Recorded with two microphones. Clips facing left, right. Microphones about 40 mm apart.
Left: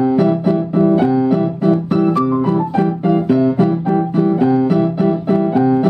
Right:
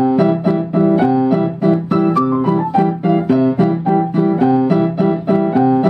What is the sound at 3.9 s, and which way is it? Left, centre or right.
Music, centre.